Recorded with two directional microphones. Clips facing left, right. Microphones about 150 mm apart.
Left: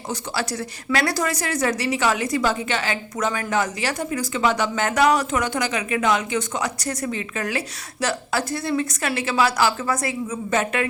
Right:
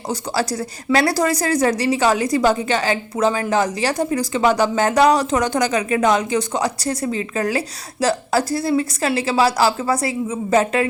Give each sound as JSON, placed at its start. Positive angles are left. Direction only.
{"t": 0.9, "sound": "a woman's voice", "side_deg": -35}